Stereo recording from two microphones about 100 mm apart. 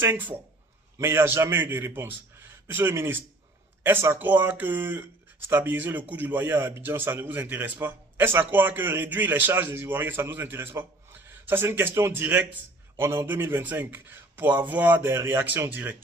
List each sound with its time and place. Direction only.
0.0 s a man's voice: 20° right (ahead or behind)